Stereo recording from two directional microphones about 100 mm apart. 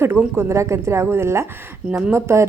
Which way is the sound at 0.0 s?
25° right (ahead or behind).